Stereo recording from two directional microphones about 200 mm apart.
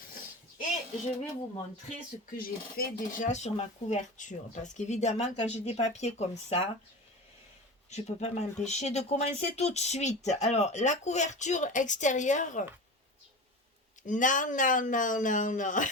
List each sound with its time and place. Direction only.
2.3 s speech: 45° left (ahead or behind)
7.9 s speech: 35° left (ahead or behind)
14.1 s speech: 40° left (ahead or behind)